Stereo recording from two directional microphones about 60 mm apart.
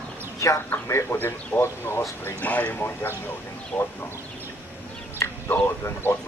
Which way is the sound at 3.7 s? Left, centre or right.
Centre.